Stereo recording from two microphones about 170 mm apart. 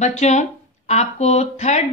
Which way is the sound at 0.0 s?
45° left (ahead or behind).